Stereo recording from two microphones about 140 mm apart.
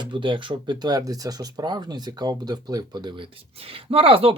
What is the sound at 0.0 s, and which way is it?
Speech, 35° right (ahead or behind).